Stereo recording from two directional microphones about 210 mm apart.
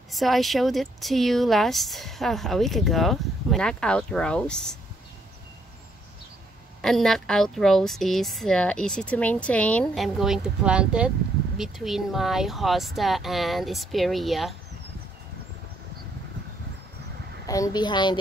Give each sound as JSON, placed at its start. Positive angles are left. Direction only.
{"t": 0.1, "sound": "speech", "side_deg": 0}
{"t": 6.8, "sound": "speech", "side_deg": 0}
{"t": 17.5, "sound": "speech", "side_deg": 20}